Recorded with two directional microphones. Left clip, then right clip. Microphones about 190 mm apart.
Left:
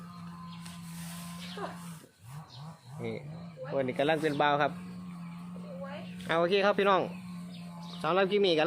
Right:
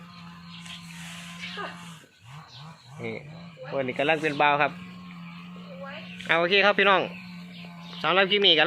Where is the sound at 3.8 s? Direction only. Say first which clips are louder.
Right 4 dB; 15° right (ahead or behind).